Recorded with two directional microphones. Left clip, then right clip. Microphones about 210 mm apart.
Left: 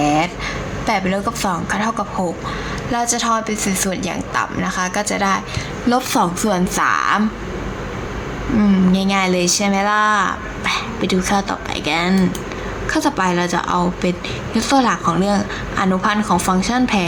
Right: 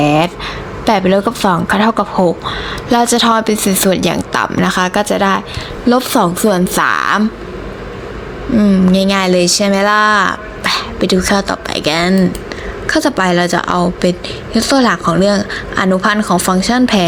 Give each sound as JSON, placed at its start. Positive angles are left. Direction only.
{"t": 0.0, "sound": "a sound", "side_deg": -35}
{"t": 0.9, "sound": "a woman's voice", "side_deg": -35}
{"t": 8.5, "sound": "a woman's voice", "side_deg": -20}